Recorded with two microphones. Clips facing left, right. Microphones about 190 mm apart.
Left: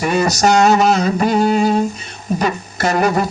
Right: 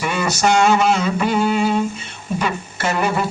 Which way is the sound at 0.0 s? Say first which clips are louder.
Left 4 dB; 40° left (ahead or behind).